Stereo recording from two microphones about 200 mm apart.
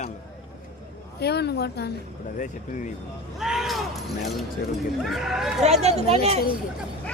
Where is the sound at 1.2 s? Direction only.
55° left (ahead or behind).